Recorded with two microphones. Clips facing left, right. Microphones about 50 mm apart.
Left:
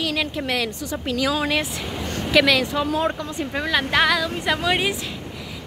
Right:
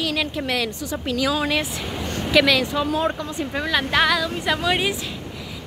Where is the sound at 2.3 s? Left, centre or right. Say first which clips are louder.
Even; left.